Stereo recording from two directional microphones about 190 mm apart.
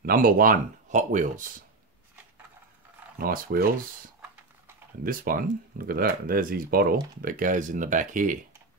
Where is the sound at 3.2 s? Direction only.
50° right (ahead or behind).